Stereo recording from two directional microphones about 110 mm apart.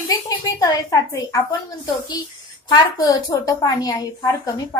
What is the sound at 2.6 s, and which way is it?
Speech, 35° left (ahead or behind).